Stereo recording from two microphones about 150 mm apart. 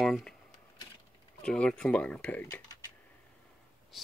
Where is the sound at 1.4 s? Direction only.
5° left (ahead or behind).